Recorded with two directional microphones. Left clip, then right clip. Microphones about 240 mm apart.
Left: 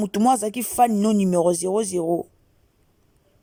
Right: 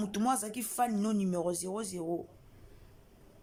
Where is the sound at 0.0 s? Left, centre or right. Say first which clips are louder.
Left 13 dB; left.